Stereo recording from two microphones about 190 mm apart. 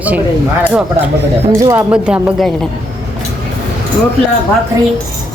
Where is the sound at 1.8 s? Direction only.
5° right (ahead or behind).